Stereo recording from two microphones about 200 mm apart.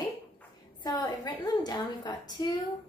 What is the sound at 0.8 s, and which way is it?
A woman's voice, 20° left (ahead or behind).